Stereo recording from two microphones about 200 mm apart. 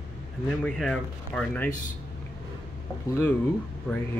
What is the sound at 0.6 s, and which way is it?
Speech, centre (ahead or behind).